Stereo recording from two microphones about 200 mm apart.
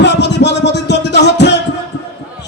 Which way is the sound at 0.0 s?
60° left (ahead or behind).